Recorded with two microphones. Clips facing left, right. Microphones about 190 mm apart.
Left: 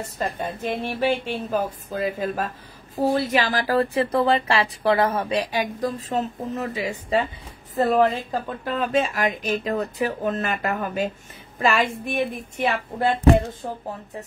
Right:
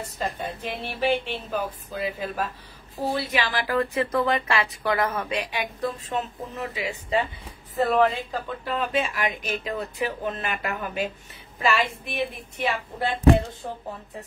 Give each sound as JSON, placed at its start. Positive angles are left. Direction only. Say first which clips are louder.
{"t": 0.4, "sound": "speech", "louder": "left 5 dB", "side_deg": 45}